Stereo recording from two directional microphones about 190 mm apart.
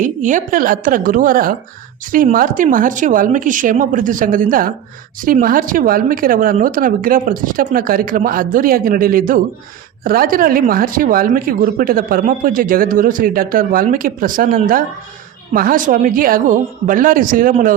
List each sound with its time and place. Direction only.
0.0 s speech: 40° right (ahead or behind)